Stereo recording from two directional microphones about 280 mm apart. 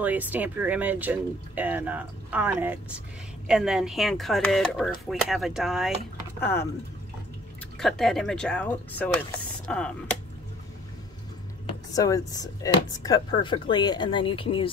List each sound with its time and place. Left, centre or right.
0.0 s speech: centre
7.8 s speech: centre
11.6 s speech: centre